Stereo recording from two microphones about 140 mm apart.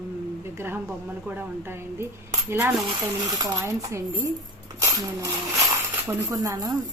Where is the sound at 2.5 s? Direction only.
20° right (ahead or behind).